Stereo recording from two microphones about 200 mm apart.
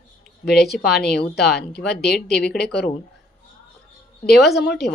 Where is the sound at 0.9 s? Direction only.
Centre (ahead or behind).